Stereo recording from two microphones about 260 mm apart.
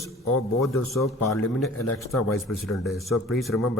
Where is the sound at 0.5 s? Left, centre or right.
Centre.